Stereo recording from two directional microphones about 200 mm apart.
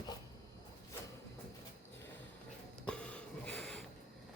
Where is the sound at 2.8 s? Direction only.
5° left (ahead or behind).